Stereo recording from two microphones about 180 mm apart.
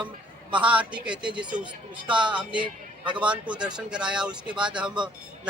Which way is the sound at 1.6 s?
25° right (ahead or behind).